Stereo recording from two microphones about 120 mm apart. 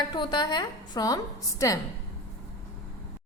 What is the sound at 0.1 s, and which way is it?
A woman's voice, 40° left (ahead or behind).